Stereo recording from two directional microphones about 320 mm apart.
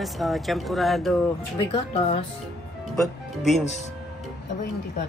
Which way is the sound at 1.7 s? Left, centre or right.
Left.